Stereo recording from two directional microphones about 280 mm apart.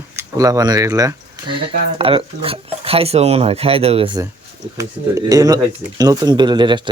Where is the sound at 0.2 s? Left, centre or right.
Centre.